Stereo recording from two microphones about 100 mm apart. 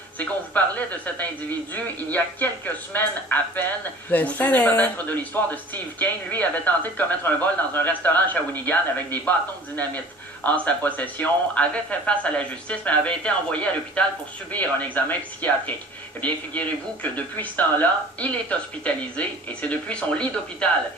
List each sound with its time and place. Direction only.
0.2 s speech: 15° left (ahead or behind)